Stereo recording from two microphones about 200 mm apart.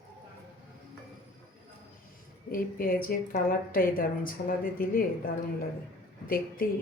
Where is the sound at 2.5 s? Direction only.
45° left (ahead or behind).